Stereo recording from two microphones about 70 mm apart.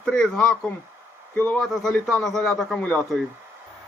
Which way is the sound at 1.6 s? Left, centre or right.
Centre.